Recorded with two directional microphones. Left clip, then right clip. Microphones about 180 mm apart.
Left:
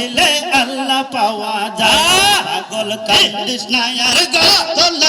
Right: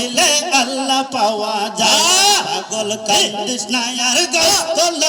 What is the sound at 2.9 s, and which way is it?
A man's voice, 40° right (ahead or behind).